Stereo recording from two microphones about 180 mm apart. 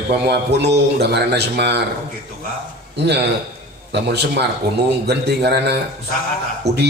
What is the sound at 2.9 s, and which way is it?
A man's voice, 70° right (ahead or behind).